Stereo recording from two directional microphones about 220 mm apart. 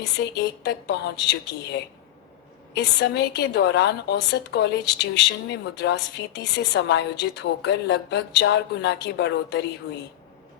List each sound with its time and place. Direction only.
0.0 s a woman's voice: 50° left (ahead or behind)